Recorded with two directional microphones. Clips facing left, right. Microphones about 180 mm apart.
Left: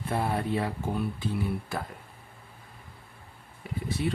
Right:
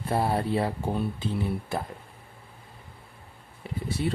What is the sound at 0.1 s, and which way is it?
Speech, 35° right (ahead or behind).